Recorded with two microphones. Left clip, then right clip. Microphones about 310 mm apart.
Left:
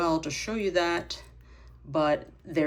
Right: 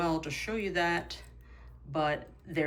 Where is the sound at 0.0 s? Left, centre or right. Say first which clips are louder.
Left 4 dB; centre.